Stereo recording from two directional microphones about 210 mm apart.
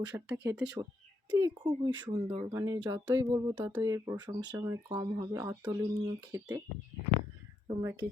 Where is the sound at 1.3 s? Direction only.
15° right (ahead or behind).